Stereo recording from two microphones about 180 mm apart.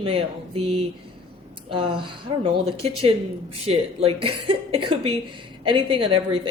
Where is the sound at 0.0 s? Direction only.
30° right (ahead or behind).